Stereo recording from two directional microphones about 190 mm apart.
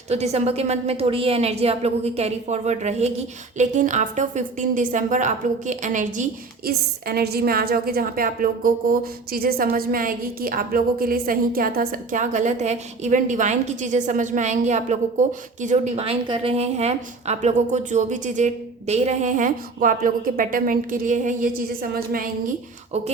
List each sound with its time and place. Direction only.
0.1 s a woman's voice: 35° right (ahead or behind)
6.7 s a woman's voice: 55° right (ahead or behind)